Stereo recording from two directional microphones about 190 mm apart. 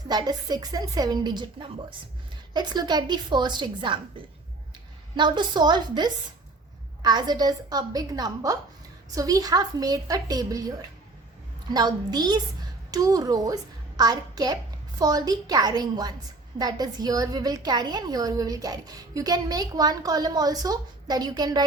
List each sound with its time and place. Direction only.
0.1 s a woman's voice: 20° right (ahead or behind)
5.1 s a woman's voice: 25° right (ahead or behind)